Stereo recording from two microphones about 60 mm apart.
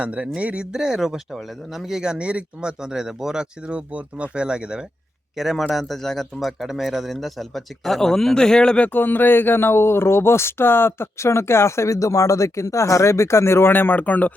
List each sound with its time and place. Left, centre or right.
0.0 s speech: right; by 2.0 s centre
2.0 s speech: centre
3.7 s speech: right
5.4 s speech: centre
8.9 s speech: left